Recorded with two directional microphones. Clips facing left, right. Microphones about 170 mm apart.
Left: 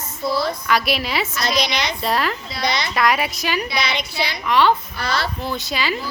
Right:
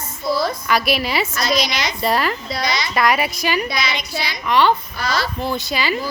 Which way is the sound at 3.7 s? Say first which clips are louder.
Even; 60° left (ahead or behind).